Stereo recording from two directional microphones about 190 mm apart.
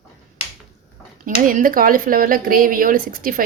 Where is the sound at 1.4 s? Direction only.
45° right (ahead or behind).